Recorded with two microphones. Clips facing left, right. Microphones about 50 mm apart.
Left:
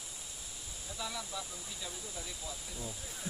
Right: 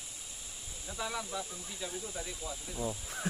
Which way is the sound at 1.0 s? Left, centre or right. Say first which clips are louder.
Right 4 dB; right.